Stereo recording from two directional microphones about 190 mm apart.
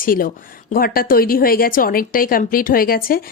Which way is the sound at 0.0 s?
45° left (ahead or behind).